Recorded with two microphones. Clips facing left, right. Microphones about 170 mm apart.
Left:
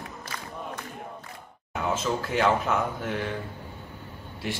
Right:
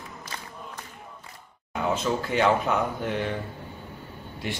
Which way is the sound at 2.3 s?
Centre (ahead or behind).